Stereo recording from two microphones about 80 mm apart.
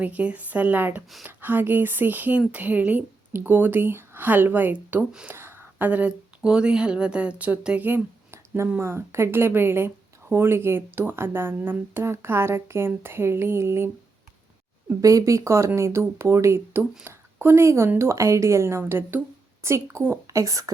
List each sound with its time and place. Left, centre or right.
0.0 s speech: centre
7.9 s a sound: right
8.8 s a woman's voice: right
15.0 s a woman's voice: right
20.2 s speech: right